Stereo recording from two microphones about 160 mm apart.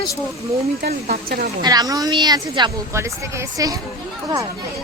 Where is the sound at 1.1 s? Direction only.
70° right (ahead or behind).